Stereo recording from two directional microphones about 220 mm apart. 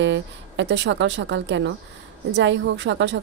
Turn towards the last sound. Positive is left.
turn(degrees=-55)  # may be behind; listen again after turning